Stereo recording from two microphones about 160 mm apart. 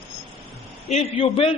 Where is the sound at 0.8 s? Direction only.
40° left (ahead or behind).